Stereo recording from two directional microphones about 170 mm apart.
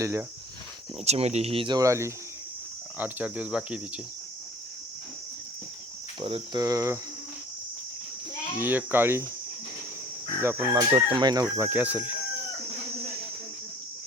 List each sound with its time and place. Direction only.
0.0 s speech: 15° right (ahead or behind)
1.0 s speech: 40° right (ahead or behind); by 4.0 s 5° right (ahead or behind)
6.1 s chicken: 30° right (ahead or behind)
6.6 s speech: 20° right (ahead or behind)
8.5 s speech: 10° right (ahead or behind)
10.4 s speech: 15° right (ahead or behind)
10.9 s chicken: 25° right (ahead or behind)
11.5 s speech: 15° right (ahead or behind)